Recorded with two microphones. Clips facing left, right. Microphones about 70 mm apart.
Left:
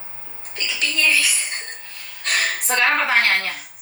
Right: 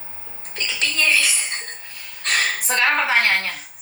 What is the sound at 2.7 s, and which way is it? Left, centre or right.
Speech, centre.